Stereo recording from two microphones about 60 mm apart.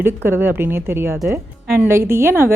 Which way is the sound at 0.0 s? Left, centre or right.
Right.